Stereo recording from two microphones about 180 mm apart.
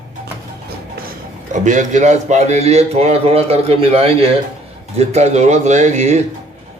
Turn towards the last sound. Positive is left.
turn(degrees=-40)  # may be behind; listen again after turning